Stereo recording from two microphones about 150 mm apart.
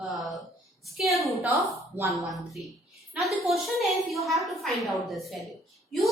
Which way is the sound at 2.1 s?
Centre (ahead or behind).